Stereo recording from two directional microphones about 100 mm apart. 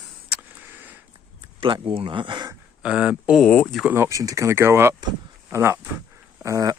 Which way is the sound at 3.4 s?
10° left (ahead or behind).